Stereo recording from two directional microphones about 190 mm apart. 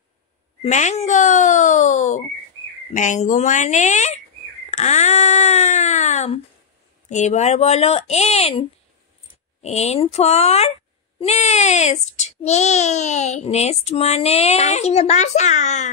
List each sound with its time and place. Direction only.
0.6 s a child's voice: 40° left (ahead or behind)